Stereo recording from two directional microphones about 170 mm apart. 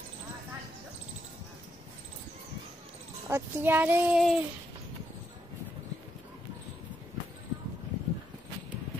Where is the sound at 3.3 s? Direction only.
10° right (ahead or behind).